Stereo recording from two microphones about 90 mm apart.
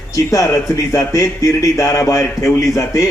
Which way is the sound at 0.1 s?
35° left (ahead or behind).